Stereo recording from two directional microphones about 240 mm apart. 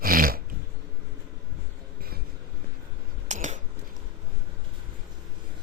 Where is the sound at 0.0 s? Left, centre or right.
Right.